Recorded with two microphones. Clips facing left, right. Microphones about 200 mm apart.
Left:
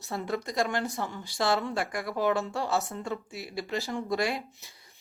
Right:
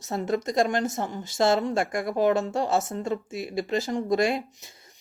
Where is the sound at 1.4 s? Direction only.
25° right (ahead or behind).